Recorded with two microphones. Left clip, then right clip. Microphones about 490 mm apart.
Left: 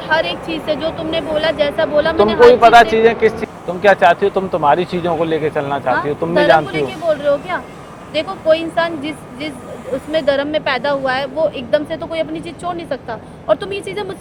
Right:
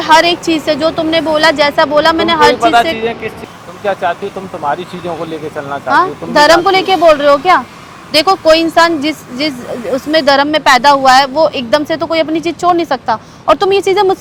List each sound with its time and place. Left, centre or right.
0.0 s a woman's voice: right
2.6 s speech: centre
5.9 s a woman's voice: right